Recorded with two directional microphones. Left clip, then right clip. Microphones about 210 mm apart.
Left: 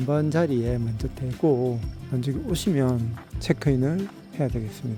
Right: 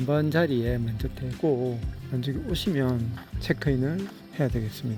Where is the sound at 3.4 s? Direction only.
15° left (ahead or behind).